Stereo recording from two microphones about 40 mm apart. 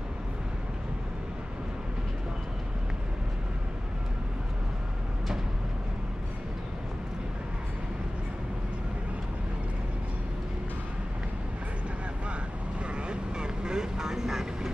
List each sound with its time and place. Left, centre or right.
12.9 s vehicle: right